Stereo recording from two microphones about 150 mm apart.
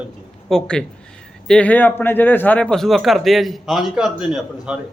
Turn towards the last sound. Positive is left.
turn(degrees=-5)  # may be behind; listen again after turning